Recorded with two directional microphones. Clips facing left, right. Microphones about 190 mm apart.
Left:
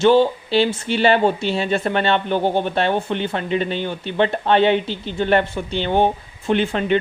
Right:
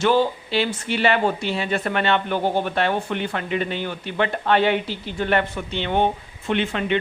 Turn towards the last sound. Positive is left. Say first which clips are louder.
# left 4 dB
turn(degrees=35)  # may be behind; listen again after turning